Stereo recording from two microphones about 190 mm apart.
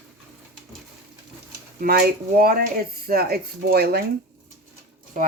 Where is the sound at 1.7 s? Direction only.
50° right (ahead or behind).